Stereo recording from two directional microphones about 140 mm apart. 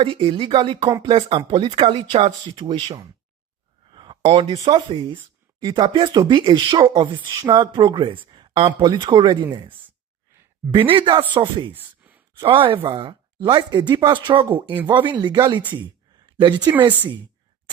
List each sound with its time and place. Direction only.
0.0 s speech: 40° right (ahead or behind)
3.9 s a sound: 35° right (ahead or behind)
4.9 s speech: 40° right (ahead or behind)
10.8 s speech: 35° right (ahead or behind)
11.7 s a sound: 10° right (ahead or behind)
12.4 s speech: 40° right (ahead or behind)